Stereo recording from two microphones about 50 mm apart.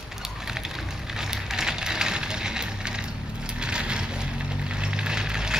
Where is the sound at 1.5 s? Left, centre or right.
Centre.